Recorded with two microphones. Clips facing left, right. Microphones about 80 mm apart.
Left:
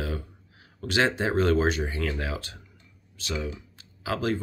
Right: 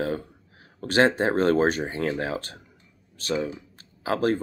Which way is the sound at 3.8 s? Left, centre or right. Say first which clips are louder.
Right 4 dB; right.